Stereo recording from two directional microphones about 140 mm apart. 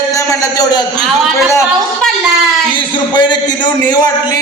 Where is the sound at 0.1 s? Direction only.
25° left (ahead or behind).